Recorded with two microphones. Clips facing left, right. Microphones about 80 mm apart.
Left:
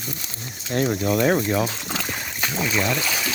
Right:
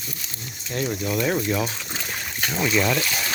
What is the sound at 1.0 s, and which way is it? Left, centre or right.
Speech, left.